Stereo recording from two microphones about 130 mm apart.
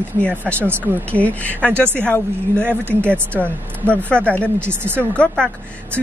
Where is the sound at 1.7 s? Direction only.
15° right (ahead or behind).